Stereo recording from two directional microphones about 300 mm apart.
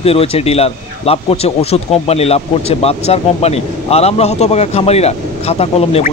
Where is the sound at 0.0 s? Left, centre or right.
Centre.